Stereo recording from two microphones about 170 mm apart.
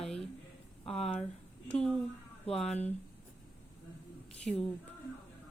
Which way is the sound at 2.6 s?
40° left (ahead or behind).